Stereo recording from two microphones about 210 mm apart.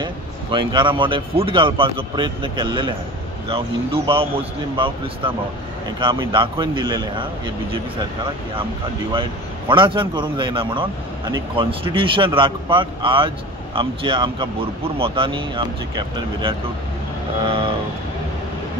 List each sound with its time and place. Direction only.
0.0 s a man's voice: 20° right (ahead or behind)
9.7 s a man's voice: 25° right (ahead or behind)